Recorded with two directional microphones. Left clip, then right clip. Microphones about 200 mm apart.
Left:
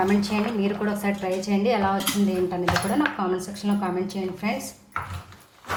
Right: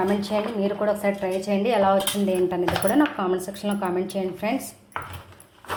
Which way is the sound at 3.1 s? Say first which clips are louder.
Right 1 dB; 35° right (ahead or behind).